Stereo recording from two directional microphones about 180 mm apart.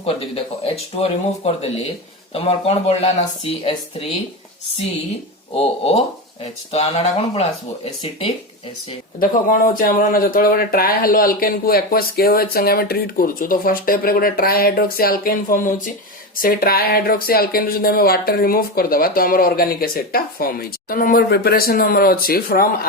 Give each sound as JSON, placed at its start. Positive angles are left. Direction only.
{"t": 0.6, "sound": "speech", "side_deg": 35}
{"t": 2.3, "sound": "speech", "side_deg": 35}
{"t": 5.5, "sound": "speech", "side_deg": 35}
{"t": 9.2, "sound": "speech", "side_deg": 50}